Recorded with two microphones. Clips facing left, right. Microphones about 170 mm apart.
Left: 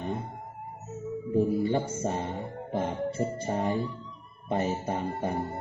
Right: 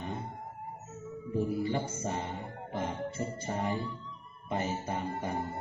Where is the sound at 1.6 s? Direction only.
30° left (ahead or behind).